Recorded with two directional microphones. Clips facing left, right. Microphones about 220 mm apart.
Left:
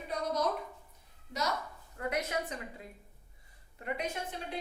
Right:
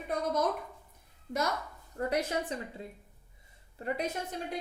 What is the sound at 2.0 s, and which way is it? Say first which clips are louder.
A woman's voice: right 3 dB; 30° right (ahead or behind).